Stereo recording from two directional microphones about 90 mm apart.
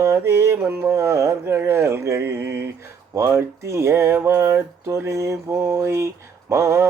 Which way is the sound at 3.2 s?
30° right (ahead or behind).